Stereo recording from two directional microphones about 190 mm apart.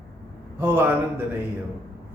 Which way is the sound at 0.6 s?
10° right (ahead or behind).